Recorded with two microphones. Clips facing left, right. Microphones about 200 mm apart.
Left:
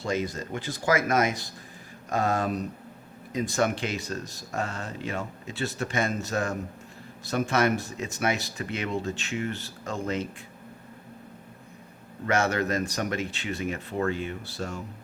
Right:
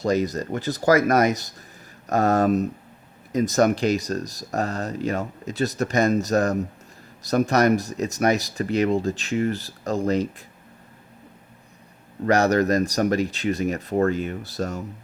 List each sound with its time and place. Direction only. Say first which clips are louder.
0.0 s speech: right 7 dB; 40° right (ahead or behind)
12.2 s speech: right 7 dB; 40° right (ahead or behind)